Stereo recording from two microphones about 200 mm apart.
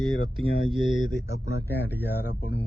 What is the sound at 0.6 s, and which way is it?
Speech, 25° right (ahead or behind).